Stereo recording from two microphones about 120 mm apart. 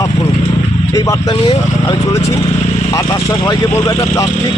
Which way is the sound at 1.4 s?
45° left (ahead or behind).